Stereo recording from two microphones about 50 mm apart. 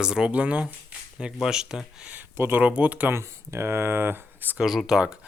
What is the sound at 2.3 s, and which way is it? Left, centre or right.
Speech, right.